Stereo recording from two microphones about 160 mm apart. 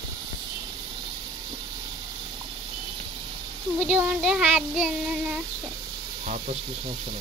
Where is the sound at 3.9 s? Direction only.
5° right (ahead or behind).